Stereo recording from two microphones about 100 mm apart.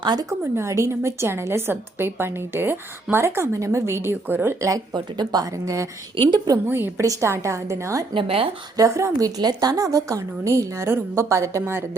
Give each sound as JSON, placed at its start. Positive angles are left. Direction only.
{"t": 0.0, "sound": "a woman's voice", "side_deg": -45}
{"t": 0.3, "sound": "a woman's voice", "side_deg": -30}
{"t": 4.9, "sound": "a woman's voice", "side_deg": -45}
{"t": 6.1, "sound": "a woman's voice", "side_deg": -55}
{"t": 6.7, "sound": "a woman's voice", "side_deg": -20}
{"t": 8.1, "sound": "speech", "side_deg": -70}
{"t": 8.7, "sound": "a woman's voice", "side_deg": -35}